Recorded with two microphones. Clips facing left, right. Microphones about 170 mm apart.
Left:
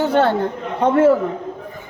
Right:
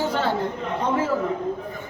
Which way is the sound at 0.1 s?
65° left (ahead or behind).